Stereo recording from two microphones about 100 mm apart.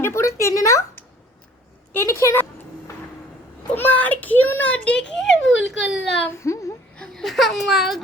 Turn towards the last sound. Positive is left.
turn(degrees=-5)  # may be behind; listen again after turning